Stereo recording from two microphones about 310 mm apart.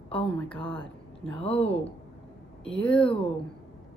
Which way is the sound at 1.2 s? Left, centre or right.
Centre.